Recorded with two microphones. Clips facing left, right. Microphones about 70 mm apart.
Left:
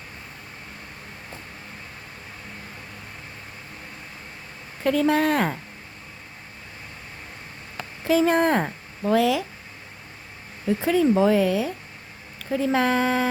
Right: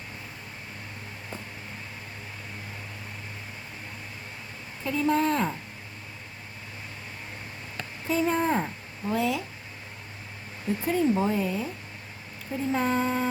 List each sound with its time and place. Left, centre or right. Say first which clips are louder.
4.8 s speech: left 5 dB; left
8.0 s a woman's voice: left 6 dB; left
10.8 s speech: left 6 dB; left